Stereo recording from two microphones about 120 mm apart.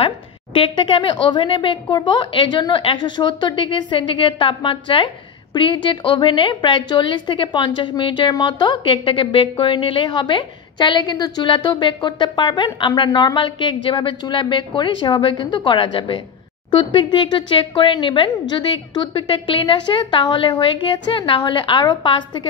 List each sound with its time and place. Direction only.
0.0 s a woman's voice: 45° left (ahead or behind)